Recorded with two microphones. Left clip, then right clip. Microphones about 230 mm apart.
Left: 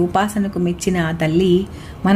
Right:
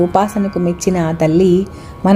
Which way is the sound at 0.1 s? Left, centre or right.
Centre.